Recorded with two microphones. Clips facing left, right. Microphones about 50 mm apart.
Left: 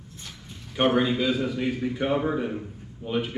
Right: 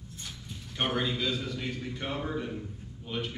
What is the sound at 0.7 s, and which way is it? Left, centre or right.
A man's voice, centre.